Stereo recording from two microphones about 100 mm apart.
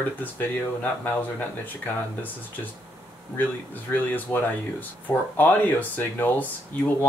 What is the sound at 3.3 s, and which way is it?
Speech, 20° left (ahead or behind).